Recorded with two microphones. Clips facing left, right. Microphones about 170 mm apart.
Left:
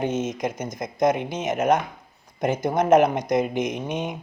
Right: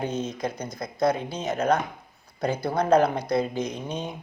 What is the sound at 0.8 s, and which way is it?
A man's voice, 20° left (ahead or behind).